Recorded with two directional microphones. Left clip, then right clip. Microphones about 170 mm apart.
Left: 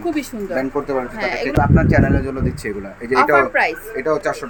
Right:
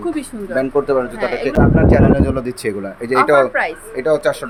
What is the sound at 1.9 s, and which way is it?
Speech, 55° right (ahead or behind).